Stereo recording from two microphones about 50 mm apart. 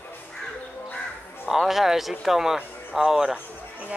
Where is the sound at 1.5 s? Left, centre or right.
Centre.